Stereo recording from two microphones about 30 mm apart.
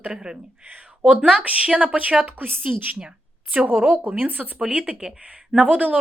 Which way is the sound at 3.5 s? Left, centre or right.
Right.